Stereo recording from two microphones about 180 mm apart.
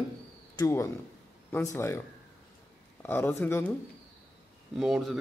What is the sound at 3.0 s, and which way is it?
Speech, 10° left (ahead or behind).